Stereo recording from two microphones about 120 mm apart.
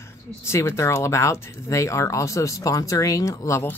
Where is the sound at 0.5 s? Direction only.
25° left (ahead or behind).